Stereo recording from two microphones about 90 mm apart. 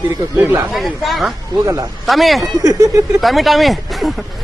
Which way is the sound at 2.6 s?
45° right (ahead or behind).